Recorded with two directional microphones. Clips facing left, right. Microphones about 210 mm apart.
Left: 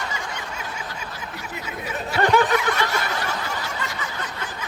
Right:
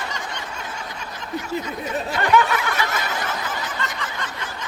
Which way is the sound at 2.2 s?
35° left (ahead or behind).